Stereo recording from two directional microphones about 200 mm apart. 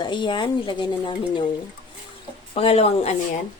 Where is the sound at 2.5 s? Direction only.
30° left (ahead or behind).